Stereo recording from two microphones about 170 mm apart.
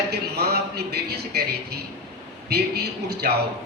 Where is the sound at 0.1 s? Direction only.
70° right (ahead or behind).